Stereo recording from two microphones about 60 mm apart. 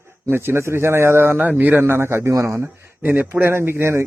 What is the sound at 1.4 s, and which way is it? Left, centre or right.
Speech, right.